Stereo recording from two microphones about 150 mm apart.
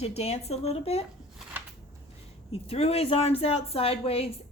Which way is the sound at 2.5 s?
40° left (ahead or behind).